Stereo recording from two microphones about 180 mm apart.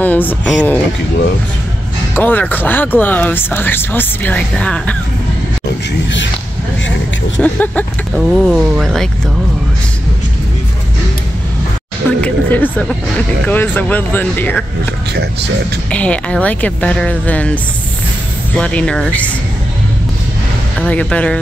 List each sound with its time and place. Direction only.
0.0 s speech: 10° left (ahead or behind)
2.1 s speech: 10° left (ahead or behind)
5.7 s speech: 90° left
7.3 s speech: 10° left (ahead or behind)
12.2 s a sound: 10° left (ahead or behind)
13.5 s speech: 10° left (ahead or behind)
15.9 s speech: 5° left (ahead or behind)
18.6 s speech: 5° left (ahead or behind)
20.8 s speech: 5° left (ahead or behind)